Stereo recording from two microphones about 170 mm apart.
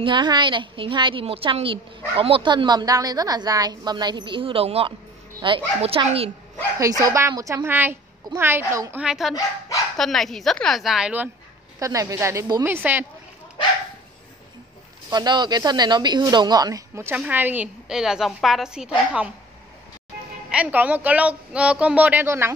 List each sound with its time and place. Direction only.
0.0 s a woman's voice: 25° right (ahead or behind)
6.8 s speech: 20° right (ahead or behind)
9.0 s a woman's voice: centre (ahead or behind)
11.8 s speech: 20° right (ahead or behind)
15.0 s a woman's voice: 25° right (ahead or behind); by 19.2 s 5° right (ahead or behind)
20.4 s speech: 10° right (ahead or behind)